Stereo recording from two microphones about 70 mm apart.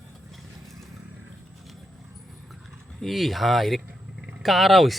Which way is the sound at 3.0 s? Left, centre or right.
Centre.